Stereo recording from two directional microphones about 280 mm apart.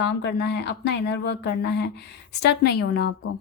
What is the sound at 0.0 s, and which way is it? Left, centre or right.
Speech, left.